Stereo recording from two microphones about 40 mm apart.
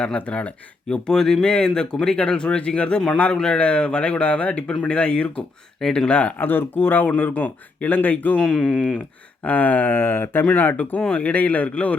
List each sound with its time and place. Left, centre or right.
0.2 s a man's voice: left
0.9 s speech: centre
6.1 s a man's voice: left
6.4 s speech: left
8.4 s speech: centre
8.6 s speech: left
9.4 s speech: left
9.9 s speech: left
10.4 s a man's voice: left